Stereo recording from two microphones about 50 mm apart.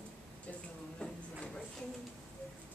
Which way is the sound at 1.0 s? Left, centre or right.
Left.